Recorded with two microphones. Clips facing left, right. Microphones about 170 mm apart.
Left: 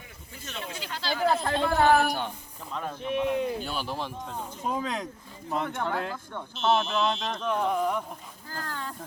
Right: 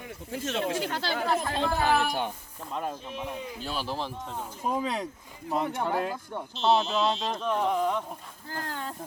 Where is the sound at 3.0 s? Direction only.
70° left (ahead or behind).